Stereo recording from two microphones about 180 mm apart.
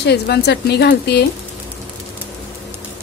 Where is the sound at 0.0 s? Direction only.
65° left (ahead or behind).